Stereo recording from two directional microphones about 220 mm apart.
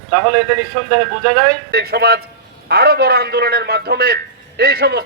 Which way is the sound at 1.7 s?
45° right (ahead or behind).